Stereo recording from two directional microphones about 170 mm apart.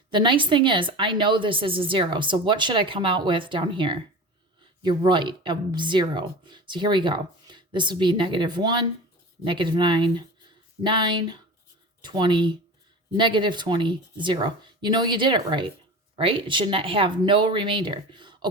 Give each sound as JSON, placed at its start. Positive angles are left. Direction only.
{"t": 0.1, "sound": "speech", "side_deg": -30}